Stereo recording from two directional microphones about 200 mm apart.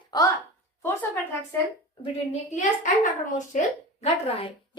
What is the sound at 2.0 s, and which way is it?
A woman's voice, 35° left (ahead or behind).